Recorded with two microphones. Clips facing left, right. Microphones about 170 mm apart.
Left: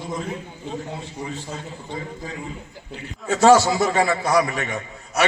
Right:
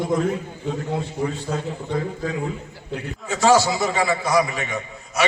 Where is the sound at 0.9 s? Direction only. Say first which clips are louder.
Right 7 dB; 70° right (ahead or behind).